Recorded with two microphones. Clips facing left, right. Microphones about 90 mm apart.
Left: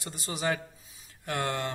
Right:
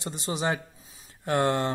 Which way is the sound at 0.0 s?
25° right (ahead or behind).